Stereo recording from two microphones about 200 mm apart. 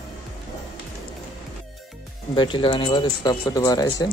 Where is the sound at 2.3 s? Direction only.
25° left (ahead or behind).